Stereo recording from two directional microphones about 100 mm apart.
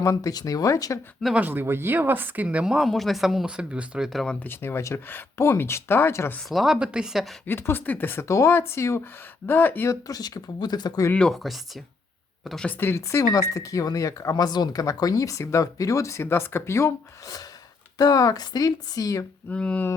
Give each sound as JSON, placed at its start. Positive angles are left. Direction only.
{"t": 0.0, "sound": "speech", "side_deg": 35}
{"t": 1.4, "sound": "speech", "side_deg": -20}
{"t": 4.4, "sound": "speech", "side_deg": 25}
{"t": 6.5, "sound": "speech", "side_deg": -5}
{"t": 7.4, "sound": "speech", "side_deg": 20}
{"t": 10.1, "sound": "speech", "side_deg": 40}
{"t": 11.1, "sound": "speech", "side_deg": 5}
{"t": 12.6, "sound": "speech", "side_deg": 20}
{"t": 19.5, "sound": "speech", "side_deg": 15}